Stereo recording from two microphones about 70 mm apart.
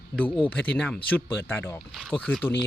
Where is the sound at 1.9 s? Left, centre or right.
Centre.